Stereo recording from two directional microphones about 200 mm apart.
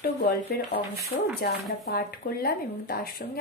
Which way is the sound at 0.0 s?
50° left (ahead or behind).